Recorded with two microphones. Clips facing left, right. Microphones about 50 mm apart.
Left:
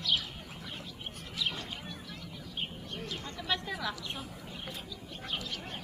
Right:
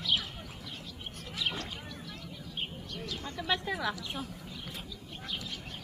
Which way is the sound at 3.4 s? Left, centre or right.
Centre.